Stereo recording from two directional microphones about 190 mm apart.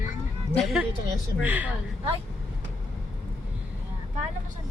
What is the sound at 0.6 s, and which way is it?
Speech, centre (ahead or behind).